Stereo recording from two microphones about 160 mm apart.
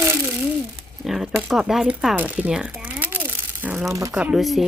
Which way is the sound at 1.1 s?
Centre (ahead or behind).